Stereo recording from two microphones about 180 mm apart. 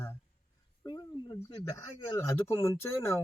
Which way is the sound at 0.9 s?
20° left (ahead or behind).